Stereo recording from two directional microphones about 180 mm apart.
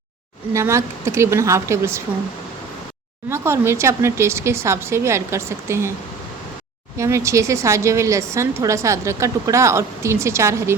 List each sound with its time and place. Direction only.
0.5 s a woman's voice: 15° right (ahead or behind)
3.2 s a woman's voice: 15° right (ahead or behind)
6.9 s a woman's voice: 15° right (ahead or behind)